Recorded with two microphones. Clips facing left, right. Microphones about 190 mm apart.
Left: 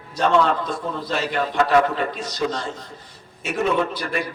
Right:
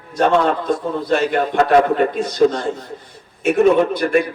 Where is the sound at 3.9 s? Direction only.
55° right (ahead or behind).